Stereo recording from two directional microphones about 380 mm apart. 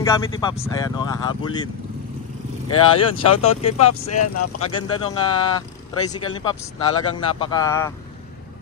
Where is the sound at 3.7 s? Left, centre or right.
Left.